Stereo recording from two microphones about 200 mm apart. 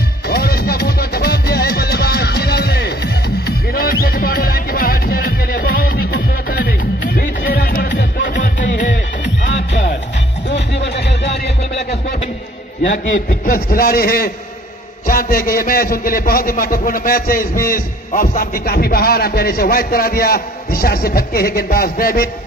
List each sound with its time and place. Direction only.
0.3 s music: 50° left (ahead or behind)
8.4 s music: 40° left (ahead or behind)
9.5 s music: 65° left (ahead or behind)
12.8 s a man's voice: 35° left (ahead or behind)